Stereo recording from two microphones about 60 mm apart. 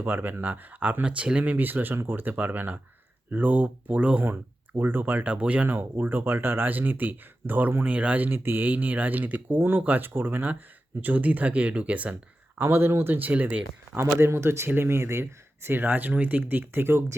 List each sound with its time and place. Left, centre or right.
0.0 s speech: right
4.2 s speech: right
5.6 s speech: right
7.9 s speech: right
12.6 s speech: right
13.1 s speech: right
14.0 s speech: right